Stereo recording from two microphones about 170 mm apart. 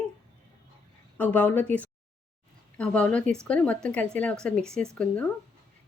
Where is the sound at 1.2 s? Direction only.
10° left (ahead or behind).